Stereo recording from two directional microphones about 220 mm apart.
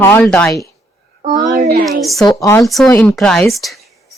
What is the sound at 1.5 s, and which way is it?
Speech, 45° right (ahead or behind).